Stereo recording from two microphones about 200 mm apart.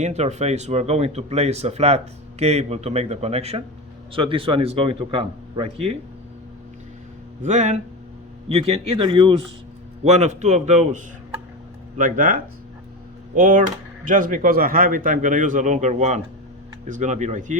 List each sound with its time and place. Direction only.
0.0 s a man's voice: 35° right (ahead or behind)
7.4 s a man's voice: 35° right (ahead or behind)
10.0 s speech: 35° right (ahead or behind)